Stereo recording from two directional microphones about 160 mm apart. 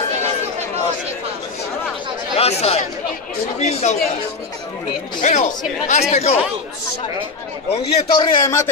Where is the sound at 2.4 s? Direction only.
40° left (ahead or behind).